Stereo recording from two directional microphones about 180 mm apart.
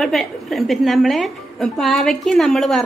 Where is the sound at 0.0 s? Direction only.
Centre (ahead or behind).